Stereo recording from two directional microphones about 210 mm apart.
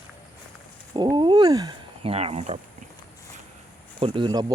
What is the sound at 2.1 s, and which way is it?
Speech, 30° right (ahead or behind).